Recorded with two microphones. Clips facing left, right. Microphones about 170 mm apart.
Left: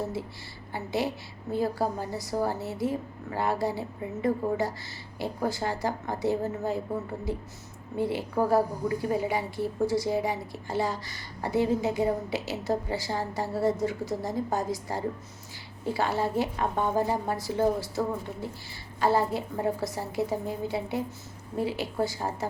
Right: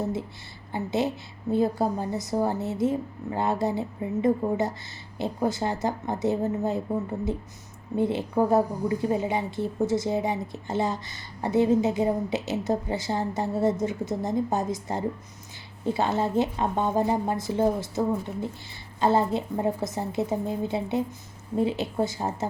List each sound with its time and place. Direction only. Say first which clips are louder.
0.0 s a woman's voice: right 3 dB; 20° right (ahead or behind)